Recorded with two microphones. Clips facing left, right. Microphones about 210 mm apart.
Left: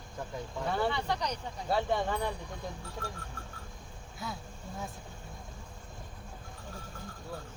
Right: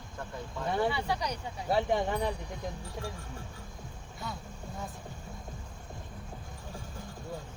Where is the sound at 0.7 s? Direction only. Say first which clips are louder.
Right 2 dB; 15° right (ahead or behind).